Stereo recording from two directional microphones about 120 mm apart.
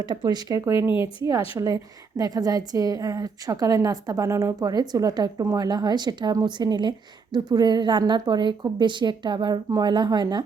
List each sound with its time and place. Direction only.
0.0 s a woman's voice: 40° right (ahead or behind)